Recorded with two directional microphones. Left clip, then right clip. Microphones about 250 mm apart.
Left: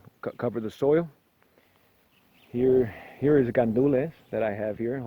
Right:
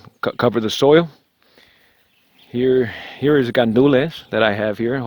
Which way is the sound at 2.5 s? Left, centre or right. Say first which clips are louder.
Right 6 dB; right.